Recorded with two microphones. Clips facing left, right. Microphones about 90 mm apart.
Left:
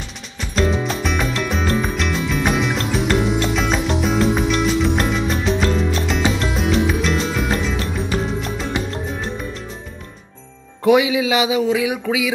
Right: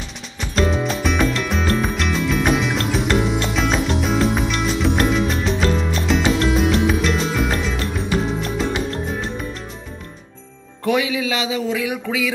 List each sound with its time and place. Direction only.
0.4 s music: centre (ahead or behind)
10.9 s speech: 15° left (ahead or behind)